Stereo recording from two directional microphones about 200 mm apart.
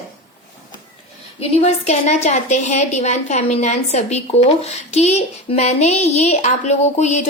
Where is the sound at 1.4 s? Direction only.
30° left (ahead or behind).